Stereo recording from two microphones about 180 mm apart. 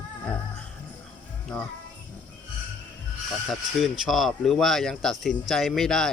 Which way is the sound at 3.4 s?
Centre (ahead or behind).